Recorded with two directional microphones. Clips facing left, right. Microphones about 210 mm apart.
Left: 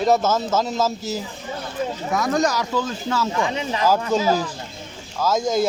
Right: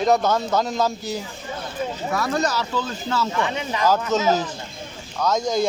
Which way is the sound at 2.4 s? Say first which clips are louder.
Left 2 dB; 10° left (ahead or behind).